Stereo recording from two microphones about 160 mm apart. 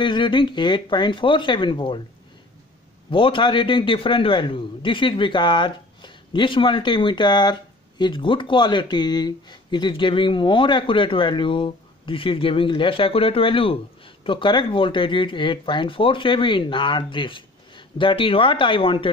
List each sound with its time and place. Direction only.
0.0 s speech: 30° left (ahead or behind)
3.1 s a man's voice: 30° left (ahead or behind)